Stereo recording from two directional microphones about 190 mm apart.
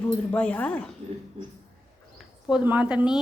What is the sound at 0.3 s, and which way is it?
Speech, 5° left (ahead or behind).